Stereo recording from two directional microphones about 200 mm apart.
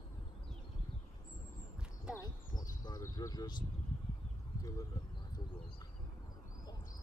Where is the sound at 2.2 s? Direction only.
20° left (ahead or behind).